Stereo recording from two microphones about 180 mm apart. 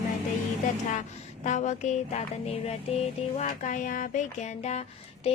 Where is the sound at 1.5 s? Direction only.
40° left (ahead or behind).